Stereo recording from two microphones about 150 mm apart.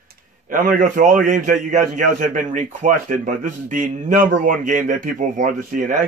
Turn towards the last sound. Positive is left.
turn(degrees=-65)  # may be behind; listen again after turning